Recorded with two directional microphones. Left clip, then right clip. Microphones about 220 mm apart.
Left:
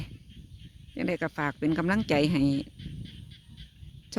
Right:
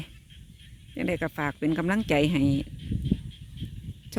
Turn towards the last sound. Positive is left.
turn(degrees=0)  # may be behind; listen again after turning